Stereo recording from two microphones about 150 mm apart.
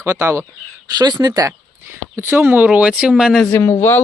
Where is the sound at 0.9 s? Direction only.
25° right (ahead or behind); by 3.4 s 5° right (ahead or behind).